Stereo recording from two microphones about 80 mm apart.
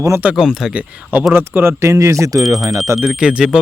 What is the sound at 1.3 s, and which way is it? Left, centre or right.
Speech, right.